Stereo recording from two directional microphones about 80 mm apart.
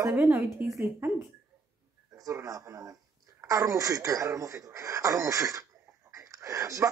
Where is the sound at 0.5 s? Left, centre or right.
Right.